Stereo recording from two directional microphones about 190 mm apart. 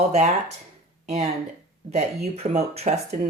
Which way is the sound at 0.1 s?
35° right (ahead or behind).